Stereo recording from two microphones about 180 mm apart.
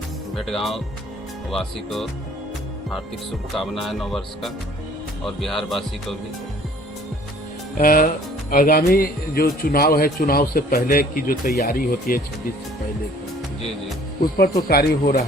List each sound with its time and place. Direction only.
0.3 s speech: centre (ahead or behind)
3.5 s speech: centre (ahead or behind)
7.8 s speech: 50° left (ahead or behind)
14.7 s speech: 55° left (ahead or behind)